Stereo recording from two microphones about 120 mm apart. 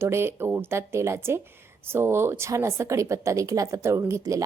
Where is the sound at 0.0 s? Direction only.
20° right (ahead or behind).